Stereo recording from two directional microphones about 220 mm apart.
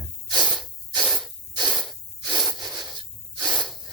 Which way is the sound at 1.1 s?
Centre (ahead or behind).